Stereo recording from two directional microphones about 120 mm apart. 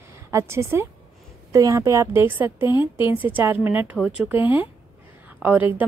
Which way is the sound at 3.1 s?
15° right (ahead or behind).